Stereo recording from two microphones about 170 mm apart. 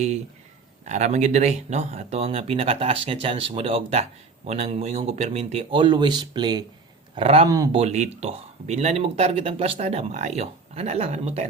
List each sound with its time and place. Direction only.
0.9 s speech: 45° right (ahead or behind); by 6.7 s 25° right (ahead or behind)
7.2 s speech: 35° right (ahead or behind)